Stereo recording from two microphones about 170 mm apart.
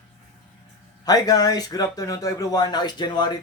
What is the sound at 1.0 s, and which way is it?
Speech, 20° left (ahead or behind).